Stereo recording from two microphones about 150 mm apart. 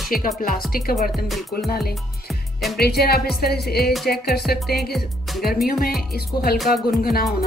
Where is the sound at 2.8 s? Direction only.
90° left.